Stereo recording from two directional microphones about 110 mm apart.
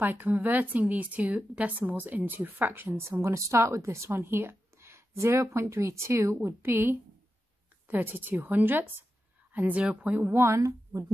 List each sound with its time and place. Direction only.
0.0 s a woman's voice: 20° right (ahead or behind)
10.2 s speech: 25° right (ahead or behind)